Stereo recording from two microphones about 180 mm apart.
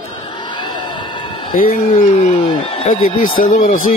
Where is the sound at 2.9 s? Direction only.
50° left (ahead or behind).